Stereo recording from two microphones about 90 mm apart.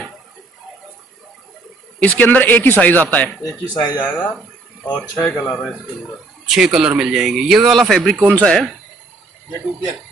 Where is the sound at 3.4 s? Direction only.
40° left (ahead or behind).